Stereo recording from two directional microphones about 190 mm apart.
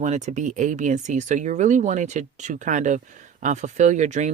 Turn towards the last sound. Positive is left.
turn(degrees=-40)  # may be behind; listen again after turning